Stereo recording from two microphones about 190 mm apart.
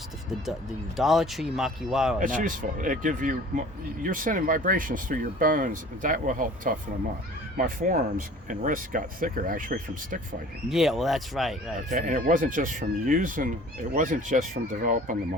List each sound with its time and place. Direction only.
0.9 s speech: centre (ahead or behind)
2.1 s speech: 45° right (ahead or behind)
10.7 s speech: centre (ahead or behind)
11.9 s speech: 40° right (ahead or behind)